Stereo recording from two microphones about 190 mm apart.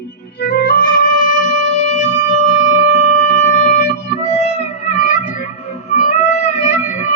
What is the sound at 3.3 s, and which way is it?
Music, 40° left (ahead or behind).